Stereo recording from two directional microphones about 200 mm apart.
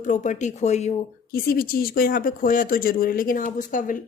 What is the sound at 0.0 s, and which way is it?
Speech, 40° left (ahead or behind).